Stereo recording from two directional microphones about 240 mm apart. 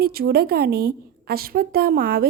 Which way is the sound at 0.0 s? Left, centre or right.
Right.